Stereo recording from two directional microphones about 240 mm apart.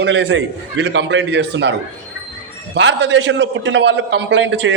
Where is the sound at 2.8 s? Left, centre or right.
Right.